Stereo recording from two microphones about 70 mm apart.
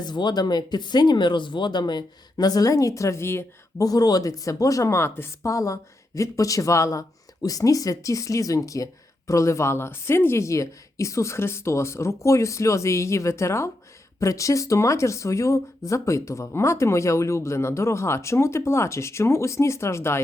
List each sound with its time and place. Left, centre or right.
0.0 s speech: left
3.8 s speech: left
5.5 s speech: left